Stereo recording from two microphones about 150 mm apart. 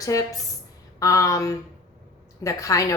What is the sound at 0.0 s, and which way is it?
A woman's voice, 25° left (ahead or behind).